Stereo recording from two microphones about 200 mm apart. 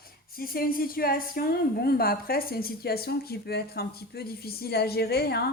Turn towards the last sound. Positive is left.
turn(degrees=50)  # may be behind; listen again after turning